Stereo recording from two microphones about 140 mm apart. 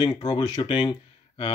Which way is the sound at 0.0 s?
30° left (ahead or behind).